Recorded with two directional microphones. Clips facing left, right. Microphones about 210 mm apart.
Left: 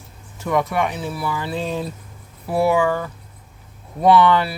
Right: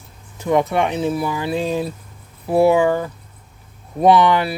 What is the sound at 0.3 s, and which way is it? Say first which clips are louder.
Speech: right 3 dB; 25° right (ahead or behind).